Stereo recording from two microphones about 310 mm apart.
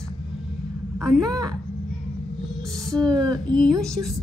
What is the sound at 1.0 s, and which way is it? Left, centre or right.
Speech, centre.